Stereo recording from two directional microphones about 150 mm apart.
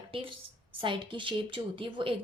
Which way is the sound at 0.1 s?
35° right (ahead or behind).